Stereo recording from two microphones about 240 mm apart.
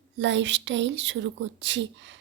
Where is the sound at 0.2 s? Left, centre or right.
Right.